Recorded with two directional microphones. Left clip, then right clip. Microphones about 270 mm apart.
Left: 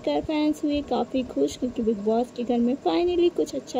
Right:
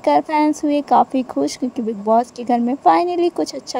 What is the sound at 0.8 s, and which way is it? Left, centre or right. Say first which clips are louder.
Speech: right 13 dB; right.